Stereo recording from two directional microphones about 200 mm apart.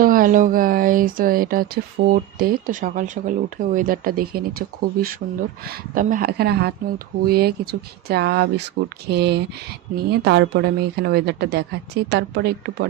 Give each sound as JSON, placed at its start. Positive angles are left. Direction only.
{"t": 0.0, "sound": "speech", "side_deg": -45}